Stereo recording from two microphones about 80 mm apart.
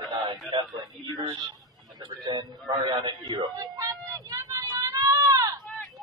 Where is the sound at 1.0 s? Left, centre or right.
Right.